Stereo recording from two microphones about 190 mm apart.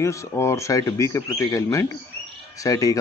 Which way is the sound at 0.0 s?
15° left (ahead or behind).